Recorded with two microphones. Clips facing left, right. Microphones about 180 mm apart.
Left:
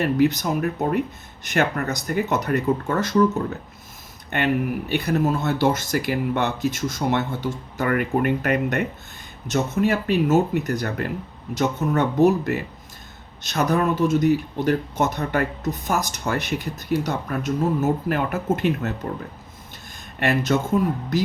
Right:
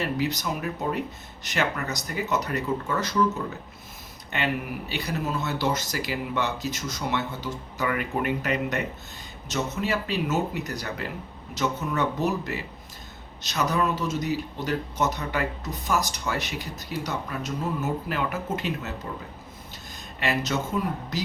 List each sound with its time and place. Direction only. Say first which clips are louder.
0.0 s speech: left 8 dB; 50° left (ahead or behind)
4.3 s speech: left 7 dB; 55° left (ahead or behind)
20.1 s speech: left 6 dB; 55° left (ahead or behind)